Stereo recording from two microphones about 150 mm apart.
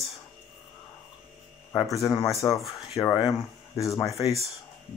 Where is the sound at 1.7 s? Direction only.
20° left (ahead or behind).